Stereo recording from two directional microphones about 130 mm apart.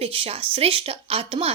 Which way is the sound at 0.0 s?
45° right (ahead or behind).